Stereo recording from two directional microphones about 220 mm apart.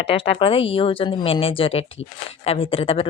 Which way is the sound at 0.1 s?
25° left (ahead or behind).